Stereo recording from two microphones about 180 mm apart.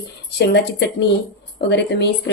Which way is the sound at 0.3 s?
70° left (ahead or behind).